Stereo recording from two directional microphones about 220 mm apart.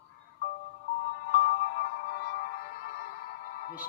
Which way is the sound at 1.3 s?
45° left (ahead or behind).